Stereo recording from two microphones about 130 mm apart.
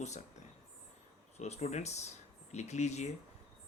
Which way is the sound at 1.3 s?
55° left (ahead or behind).